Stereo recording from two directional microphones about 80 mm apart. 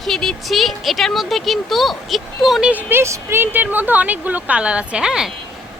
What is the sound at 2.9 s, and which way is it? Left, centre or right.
Speech, right.